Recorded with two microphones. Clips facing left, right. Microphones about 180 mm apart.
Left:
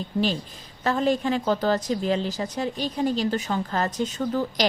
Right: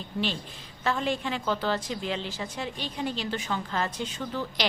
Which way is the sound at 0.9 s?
40° left (ahead or behind).